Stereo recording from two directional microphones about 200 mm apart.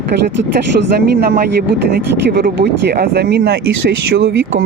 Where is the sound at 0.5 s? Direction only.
50° right (ahead or behind).